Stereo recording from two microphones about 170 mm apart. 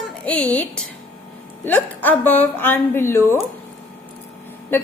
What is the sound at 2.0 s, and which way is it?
A woman's voice, 10° left (ahead or behind).